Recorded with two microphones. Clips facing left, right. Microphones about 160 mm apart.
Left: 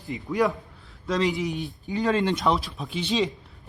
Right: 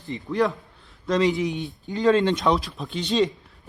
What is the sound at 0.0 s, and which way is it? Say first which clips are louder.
A man's voice: right 1 dB; centre (ahead or behind).